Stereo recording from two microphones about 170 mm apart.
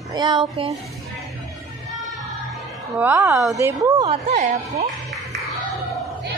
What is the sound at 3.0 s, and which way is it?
A woman's voice, 10° right (ahead or behind).